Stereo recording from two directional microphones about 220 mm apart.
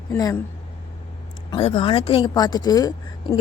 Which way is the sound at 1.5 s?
25° left (ahead or behind).